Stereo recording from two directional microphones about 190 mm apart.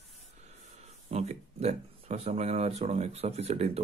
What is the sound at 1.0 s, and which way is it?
Speech, 35° right (ahead or behind).